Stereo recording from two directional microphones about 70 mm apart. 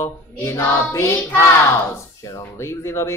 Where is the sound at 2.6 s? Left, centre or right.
Left.